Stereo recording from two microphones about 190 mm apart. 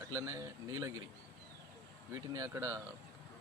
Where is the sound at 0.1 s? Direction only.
15° right (ahead or behind).